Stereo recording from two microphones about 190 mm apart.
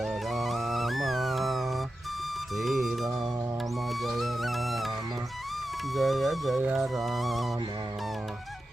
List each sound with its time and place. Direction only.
0.0 s music: centre (ahead or behind)
5.9 s music: centre (ahead or behind)